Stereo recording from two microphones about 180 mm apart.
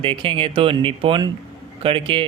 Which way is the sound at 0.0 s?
30° right (ahead or behind).